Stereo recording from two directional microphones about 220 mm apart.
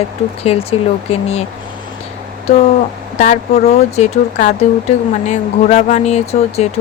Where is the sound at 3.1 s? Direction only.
35° left (ahead or behind).